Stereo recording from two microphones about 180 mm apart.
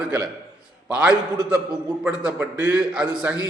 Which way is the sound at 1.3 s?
20° right (ahead or behind).